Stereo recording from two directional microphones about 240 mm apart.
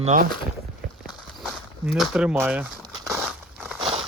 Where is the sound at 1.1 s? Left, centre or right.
Centre.